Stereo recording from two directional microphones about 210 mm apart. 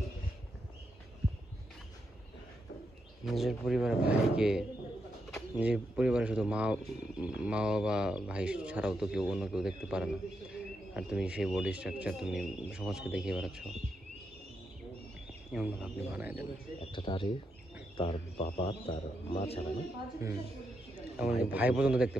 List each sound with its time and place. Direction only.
3.3 s speech: centre (ahead or behind)
15.5 s speech: 5° right (ahead or behind)
16.8 s a man's voice: 25° left (ahead or behind)
20.2 s speech: 15° right (ahead or behind)